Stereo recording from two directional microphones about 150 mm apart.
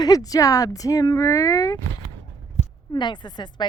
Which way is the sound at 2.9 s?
30° left (ahead or behind).